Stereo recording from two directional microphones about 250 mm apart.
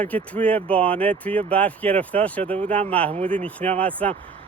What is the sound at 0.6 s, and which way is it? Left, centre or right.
Speech, right.